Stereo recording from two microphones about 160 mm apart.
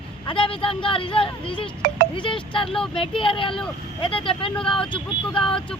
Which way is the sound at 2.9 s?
35° left (ahead or behind).